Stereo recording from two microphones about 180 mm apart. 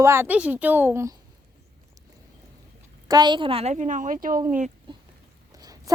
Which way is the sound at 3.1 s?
25° right (ahead or behind).